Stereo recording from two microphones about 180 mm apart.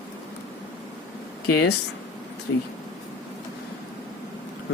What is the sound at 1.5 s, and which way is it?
Speech, 65° left (ahead or behind).